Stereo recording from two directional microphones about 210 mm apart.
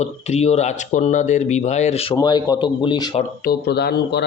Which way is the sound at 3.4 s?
50° left (ahead or behind).